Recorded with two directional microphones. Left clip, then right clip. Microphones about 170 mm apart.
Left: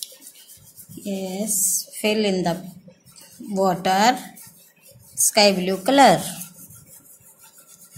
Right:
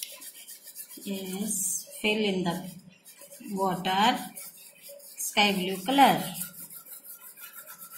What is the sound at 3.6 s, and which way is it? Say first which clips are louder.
Speech: left 7 dB; 70° left (ahead or behind).